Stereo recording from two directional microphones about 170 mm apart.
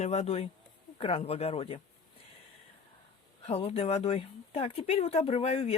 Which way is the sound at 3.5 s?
35° left (ahead or behind).